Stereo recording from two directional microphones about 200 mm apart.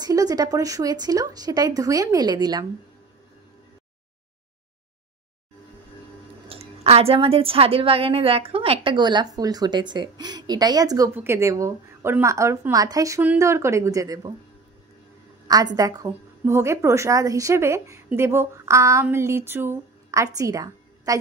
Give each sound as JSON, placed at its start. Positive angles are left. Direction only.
{"t": 0.0, "sound": "a woman's voice", "side_deg": -20}
{"t": 6.5, "sound": "a woman's voice", "side_deg": -30}
{"t": 15.4, "sound": "a woman's voice", "side_deg": -20}